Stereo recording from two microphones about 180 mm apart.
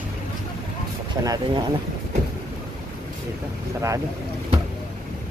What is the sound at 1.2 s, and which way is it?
Speech, 20° right (ahead or behind).